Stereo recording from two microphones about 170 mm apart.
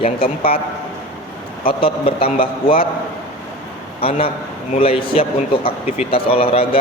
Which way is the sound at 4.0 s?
35° left (ahead or behind).